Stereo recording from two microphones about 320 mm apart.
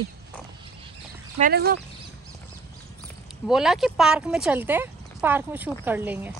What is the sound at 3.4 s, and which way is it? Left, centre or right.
Speech, centre.